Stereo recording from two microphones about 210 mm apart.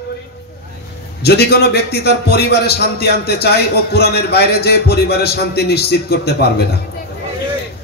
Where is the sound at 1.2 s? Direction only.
50° left (ahead or behind).